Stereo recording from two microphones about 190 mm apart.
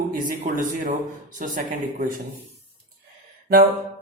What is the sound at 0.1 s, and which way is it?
Speech, 45° right (ahead or behind).